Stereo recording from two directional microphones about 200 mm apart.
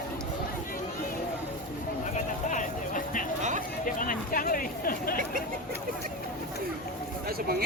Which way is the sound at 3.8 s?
45° left (ahead or behind).